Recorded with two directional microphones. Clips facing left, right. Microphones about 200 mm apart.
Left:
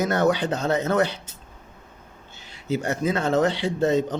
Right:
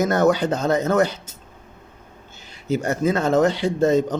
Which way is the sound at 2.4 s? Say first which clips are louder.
Right 3 dB; 45° right (ahead or behind).